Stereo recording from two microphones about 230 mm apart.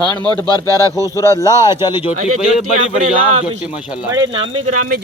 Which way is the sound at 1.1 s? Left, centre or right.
Centre.